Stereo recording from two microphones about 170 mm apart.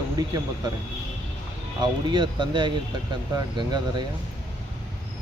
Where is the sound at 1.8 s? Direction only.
30° right (ahead or behind).